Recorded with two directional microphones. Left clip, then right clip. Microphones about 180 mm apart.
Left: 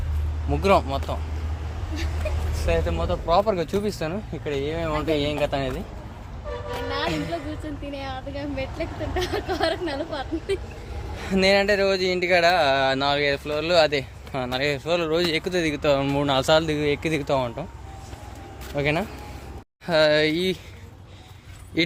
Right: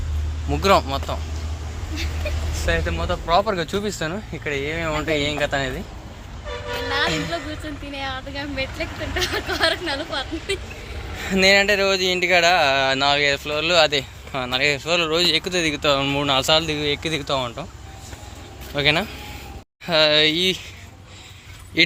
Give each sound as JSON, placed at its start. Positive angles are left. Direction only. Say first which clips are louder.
{"t": 0.5, "sound": "speech", "louder": "right 2 dB", "side_deg": 0}
{"t": 2.6, "sound": "speech", "louder": "right 1 dB", "side_deg": 0}
{"t": 6.7, "sound": "music", "louder": "right 5 dB", "side_deg": 5}
{"t": 7.9, "sound": "speech", "louder": "right 6 dB", "side_deg": 10}
{"t": 11.2, "sound": "speech", "louder": "right 4 dB", "side_deg": 0}
{"t": 18.8, "sound": "speech", "louder": "right 5 dB", "side_deg": 0}
{"t": 19.8, "sound": "speech", "louder": "right 2 dB", "side_deg": 15}
{"t": 21.8, "sound": "speech", "louder": "right 6 dB", "side_deg": 15}